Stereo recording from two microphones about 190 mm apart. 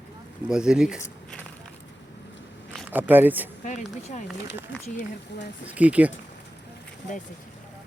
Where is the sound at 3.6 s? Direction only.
40° left (ahead or behind).